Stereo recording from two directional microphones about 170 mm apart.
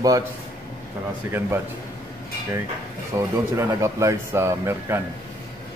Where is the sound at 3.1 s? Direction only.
15° right (ahead or behind).